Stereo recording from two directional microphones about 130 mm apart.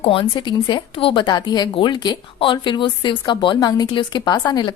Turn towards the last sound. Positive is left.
turn(degrees=30)  # may be behind; listen again after turning